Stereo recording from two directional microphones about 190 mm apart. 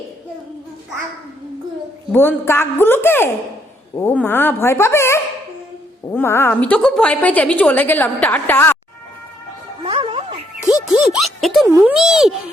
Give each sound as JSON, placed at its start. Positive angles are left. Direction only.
{"t": 2.1, "sound": "a woman's voice", "side_deg": 10}
{"t": 9.8, "sound": "music", "side_deg": -30}
{"t": 10.6, "sound": "music", "side_deg": 20}
{"t": 10.9, "sound": "a child's voice", "side_deg": 0}